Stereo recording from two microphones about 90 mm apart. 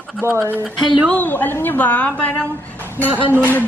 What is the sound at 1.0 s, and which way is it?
A woman's voice, 20° left (ahead or behind).